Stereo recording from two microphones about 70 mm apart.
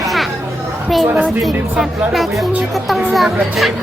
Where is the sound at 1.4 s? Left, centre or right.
Centre.